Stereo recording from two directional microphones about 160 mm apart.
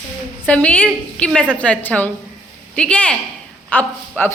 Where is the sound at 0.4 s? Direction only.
10° left (ahead or behind).